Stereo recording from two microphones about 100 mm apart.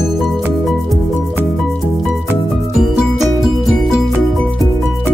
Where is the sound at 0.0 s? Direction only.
Centre (ahead or behind).